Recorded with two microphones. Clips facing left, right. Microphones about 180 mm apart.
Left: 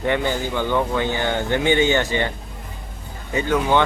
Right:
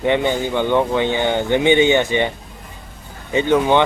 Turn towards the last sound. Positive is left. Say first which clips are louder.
# right 4 dB
turn(degrees=-20)  # may be behind; listen again after turning